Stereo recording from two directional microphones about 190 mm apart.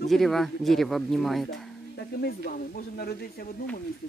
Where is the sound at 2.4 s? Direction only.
50° left (ahead or behind).